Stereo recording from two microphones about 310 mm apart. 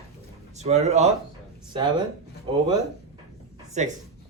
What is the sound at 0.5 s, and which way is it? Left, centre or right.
A man's voice, right.